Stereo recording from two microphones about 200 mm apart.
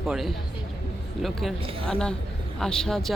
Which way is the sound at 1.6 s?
30° right (ahead or behind).